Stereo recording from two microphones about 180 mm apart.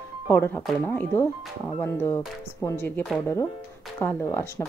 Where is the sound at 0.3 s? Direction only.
10° left (ahead or behind).